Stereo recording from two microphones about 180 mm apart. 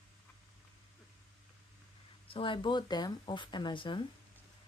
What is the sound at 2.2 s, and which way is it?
Speech, 30° left (ahead or behind).